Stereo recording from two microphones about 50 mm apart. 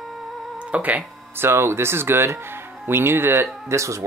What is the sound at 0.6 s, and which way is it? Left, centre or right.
Music, right.